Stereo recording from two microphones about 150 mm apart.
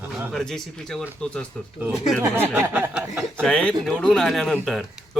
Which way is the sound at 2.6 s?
15° right (ahead or behind).